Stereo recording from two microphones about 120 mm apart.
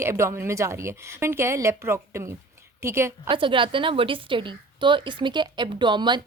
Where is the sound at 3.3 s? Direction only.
45° right (ahead or behind).